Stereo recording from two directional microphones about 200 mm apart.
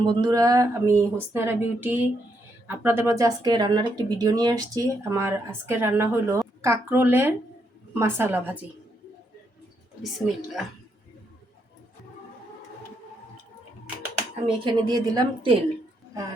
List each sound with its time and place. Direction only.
0.0 s speech: 20° right (ahead or behind)
10.0 s a woman's voice: centre (ahead or behind)
14.4 s a woman's voice: 25° right (ahead or behind)